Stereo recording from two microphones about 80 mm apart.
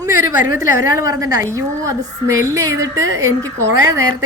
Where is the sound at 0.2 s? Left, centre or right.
Right.